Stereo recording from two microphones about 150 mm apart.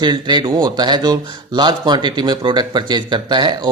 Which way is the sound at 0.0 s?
30° right (ahead or behind).